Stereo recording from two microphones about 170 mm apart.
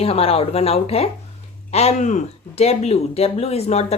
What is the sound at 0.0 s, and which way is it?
A woman's voice, 35° left (ahead or behind).